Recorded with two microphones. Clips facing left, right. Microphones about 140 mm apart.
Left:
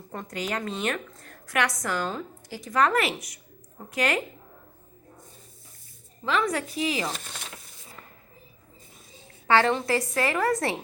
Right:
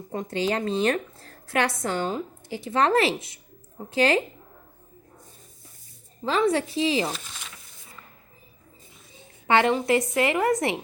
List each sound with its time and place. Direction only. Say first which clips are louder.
0.1 s a woman's voice: right 6 dB; 25° right (ahead or behind)
6.2 s a woman's voice: right 4 dB; 30° right (ahead or behind)
9.5 s a woman's voice: right 2 dB; 20° right (ahead or behind)